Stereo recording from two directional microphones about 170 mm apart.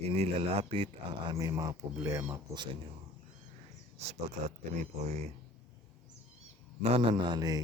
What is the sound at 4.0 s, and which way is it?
Speech, 40° right (ahead or behind).